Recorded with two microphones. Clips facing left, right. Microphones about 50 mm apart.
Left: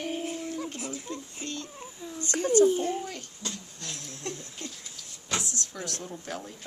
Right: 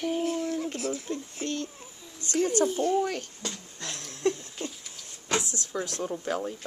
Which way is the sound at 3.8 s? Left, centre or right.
Right.